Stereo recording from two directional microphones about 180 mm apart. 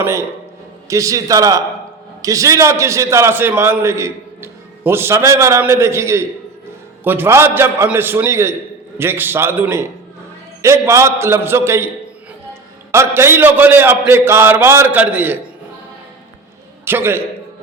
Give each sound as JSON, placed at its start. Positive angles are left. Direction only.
{"t": 0.0, "sound": "a man's voice", "side_deg": -15}
{"t": 12.9, "sound": "a man's voice", "side_deg": -15}
{"t": 16.8, "sound": "a man's voice", "side_deg": -15}